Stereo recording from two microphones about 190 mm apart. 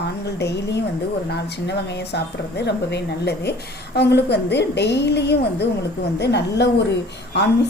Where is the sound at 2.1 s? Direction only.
60° left (ahead or behind).